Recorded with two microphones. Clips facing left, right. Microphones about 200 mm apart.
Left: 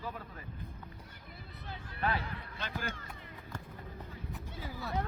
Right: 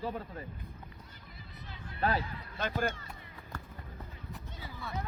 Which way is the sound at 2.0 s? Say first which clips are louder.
Right 3 dB; 35° right (ahead or behind).